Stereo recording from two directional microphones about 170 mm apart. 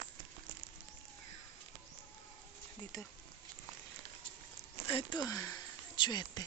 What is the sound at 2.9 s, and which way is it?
Speech, 20° left (ahead or behind).